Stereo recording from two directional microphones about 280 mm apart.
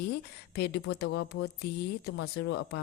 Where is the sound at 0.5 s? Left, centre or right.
Left.